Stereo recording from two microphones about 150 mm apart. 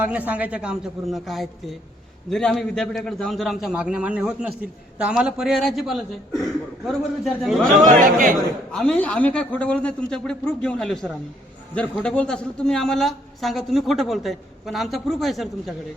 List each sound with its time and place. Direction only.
0.0 s a man's voice: 10° right (ahead or behind)
8.0 s a man's voice: 65° right (ahead or behind)
8.7 s a man's voice: 5° left (ahead or behind)